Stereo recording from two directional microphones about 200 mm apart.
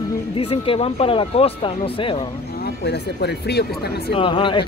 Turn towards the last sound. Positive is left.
turn(degrees=25)  # may be behind; listen again after turning